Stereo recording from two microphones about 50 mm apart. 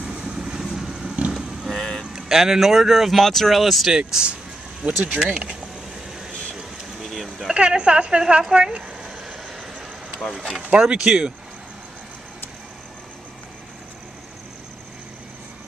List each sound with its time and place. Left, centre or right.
0.5 s vehicle: centre
1.7 s vehicle: centre
2.1 s speech: centre
4.1 s speech: centre
7.1 s a sound: centre
7.5 s speech: centre
9.8 s vehicle: centre
10.8 s speech: centre